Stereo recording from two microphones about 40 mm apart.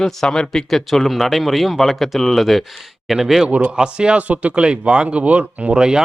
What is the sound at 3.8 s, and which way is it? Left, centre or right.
Speech, right.